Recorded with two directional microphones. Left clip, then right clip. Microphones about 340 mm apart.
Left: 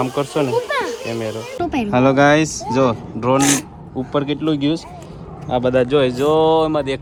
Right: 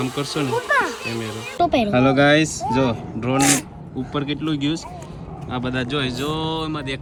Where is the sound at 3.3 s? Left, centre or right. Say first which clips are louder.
Left 3 dB; centre.